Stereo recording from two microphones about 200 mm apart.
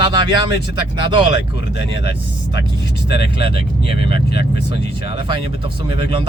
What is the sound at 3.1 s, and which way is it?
Speech, 25° right (ahead or behind).